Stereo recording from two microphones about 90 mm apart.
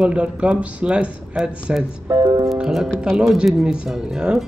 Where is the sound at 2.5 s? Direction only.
5° right (ahead or behind).